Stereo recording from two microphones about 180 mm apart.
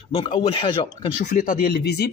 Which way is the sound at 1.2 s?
45° left (ahead or behind).